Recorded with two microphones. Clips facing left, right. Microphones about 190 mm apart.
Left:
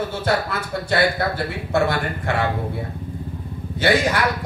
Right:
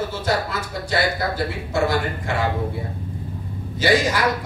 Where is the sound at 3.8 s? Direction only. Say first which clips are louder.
Even; 60° left (ahead or behind).